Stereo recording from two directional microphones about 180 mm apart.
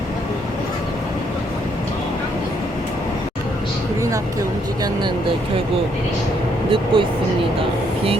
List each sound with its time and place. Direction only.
6.7 s speech: 30° right (ahead or behind)